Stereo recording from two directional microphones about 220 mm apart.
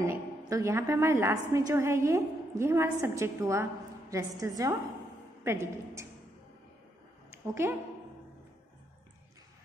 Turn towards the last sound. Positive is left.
turn(degrees=-10)  # may be behind; listen again after turning